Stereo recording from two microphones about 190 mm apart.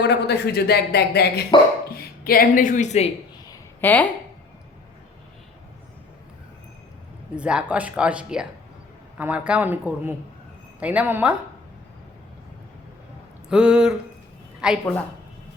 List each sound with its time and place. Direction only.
0.1 s a man's voice: 60° left (ahead or behind); by 3.1 s 35° left (ahead or behind)
3.5 s a sound: 10° left (ahead or behind)
7.3 s speech: 5° right (ahead or behind)
13.5 s speech: 5° right (ahead or behind)